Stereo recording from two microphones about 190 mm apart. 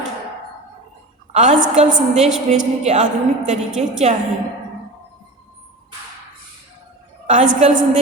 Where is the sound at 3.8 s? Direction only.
35° right (ahead or behind).